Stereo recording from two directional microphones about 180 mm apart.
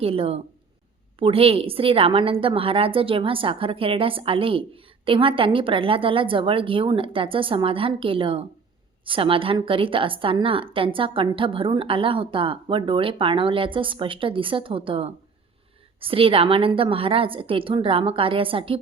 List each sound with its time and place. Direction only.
0.0 s a woman's voice: 35° right (ahead or behind)